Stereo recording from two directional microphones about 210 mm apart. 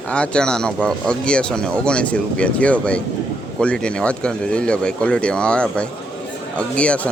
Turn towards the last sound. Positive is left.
turn(degrees=5)  # may be behind; listen again after turning